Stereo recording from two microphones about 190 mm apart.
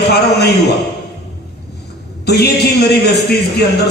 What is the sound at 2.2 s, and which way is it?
Speech, 60° left (ahead or behind).